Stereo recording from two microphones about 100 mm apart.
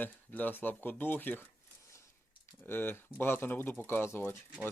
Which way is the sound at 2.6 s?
20° left (ahead or behind).